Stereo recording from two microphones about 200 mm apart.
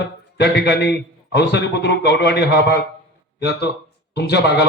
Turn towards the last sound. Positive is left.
turn(degrees=55)  # may be behind; listen again after turning